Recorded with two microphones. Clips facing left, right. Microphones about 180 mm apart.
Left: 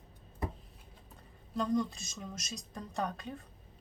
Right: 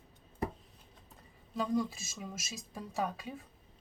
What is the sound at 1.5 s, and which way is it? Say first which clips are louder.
A woman's voice: left 1 dB; 5° right (ahead or behind).